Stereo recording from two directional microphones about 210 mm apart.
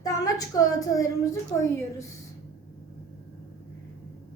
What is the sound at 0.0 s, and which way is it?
A woman's voice, 15° left (ahead or behind).